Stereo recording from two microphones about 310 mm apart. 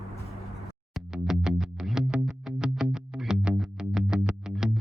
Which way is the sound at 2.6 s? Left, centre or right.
Centre.